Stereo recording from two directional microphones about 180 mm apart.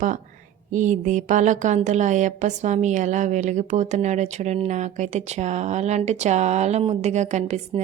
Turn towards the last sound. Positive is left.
turn(degrees=-40)  # may be behind; listen again after turning